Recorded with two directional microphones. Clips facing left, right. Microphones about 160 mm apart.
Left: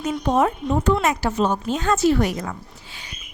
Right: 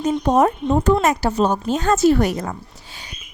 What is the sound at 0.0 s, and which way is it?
Speech, 35° right (ahead or behind).